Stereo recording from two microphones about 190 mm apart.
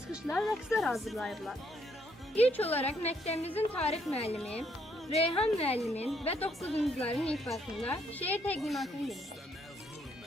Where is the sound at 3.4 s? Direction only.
10° left (ahead or behind).